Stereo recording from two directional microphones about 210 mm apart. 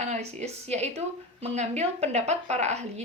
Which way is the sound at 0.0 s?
30° right (ahead or behind).